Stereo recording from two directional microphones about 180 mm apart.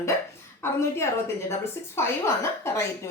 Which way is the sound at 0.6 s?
15° left (ahead or behind).